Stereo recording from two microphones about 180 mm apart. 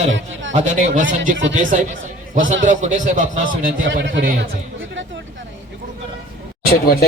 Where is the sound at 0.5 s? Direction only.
40° right (ahead or behind).